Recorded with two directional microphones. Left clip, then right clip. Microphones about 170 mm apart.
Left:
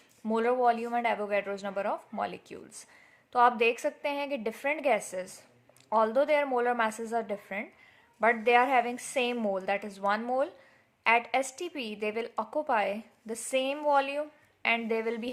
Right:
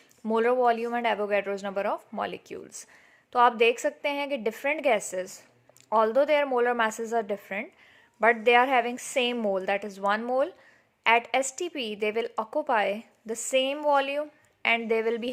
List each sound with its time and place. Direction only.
0.3 s speech: 35° right (ahead or behind)